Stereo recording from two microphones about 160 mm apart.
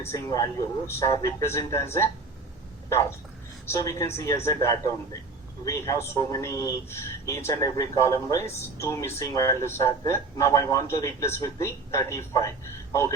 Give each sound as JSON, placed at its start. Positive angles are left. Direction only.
{"t": 0.0, "sound": "a man's voice", "side_deg": 20}
{"t": 3.7, "sound": "a man's voice", "side_deg": 20}